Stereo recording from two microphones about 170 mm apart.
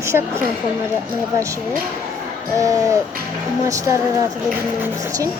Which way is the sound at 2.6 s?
20° right (ahead or behind).